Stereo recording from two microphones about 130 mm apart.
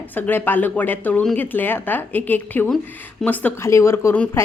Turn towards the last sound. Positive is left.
turn(degrees=15)  # may be behind; listen again after turning